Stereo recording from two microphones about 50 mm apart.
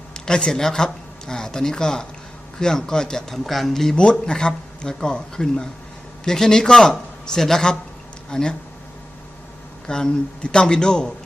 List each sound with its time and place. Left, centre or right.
0.1 s speech: centre
3.9 s speech: centre
9.8 s speech: centre